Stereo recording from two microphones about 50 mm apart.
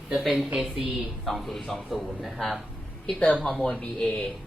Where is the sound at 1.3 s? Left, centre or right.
Centre.